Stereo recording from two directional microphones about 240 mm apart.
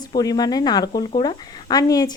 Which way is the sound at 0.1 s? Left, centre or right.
Centre.